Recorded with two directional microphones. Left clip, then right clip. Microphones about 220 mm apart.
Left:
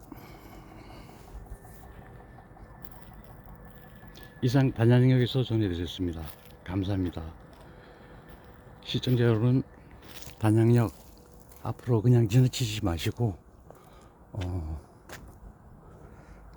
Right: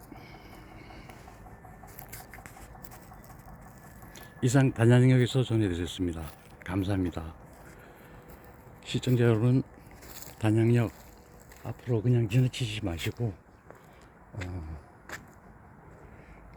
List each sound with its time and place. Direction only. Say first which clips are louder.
0.8 s vehicle: even; 15° left (ahead or behind)
4.4 s speech: right 1 dB; centre (ahead or behind)
9.0 s speech: even; centre (ahead or behind)
10.4 s speech: left 2 dB; 10° left (ahead or behind)
11.6 s speech: left 3 dB; 25° left (ahead or behind)